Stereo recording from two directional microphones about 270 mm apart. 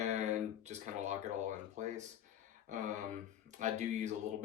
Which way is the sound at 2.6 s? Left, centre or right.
Right.